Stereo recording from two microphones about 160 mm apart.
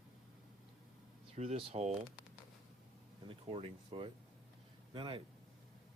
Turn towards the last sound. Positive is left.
turn(degrees=-35)  # may be behind; listen again after turning